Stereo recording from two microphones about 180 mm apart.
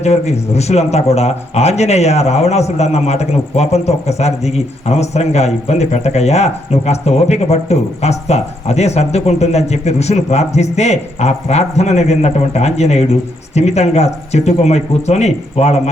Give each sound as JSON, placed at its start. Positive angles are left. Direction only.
{"t": 0.0, "sound": "speech", "side_deg": 35}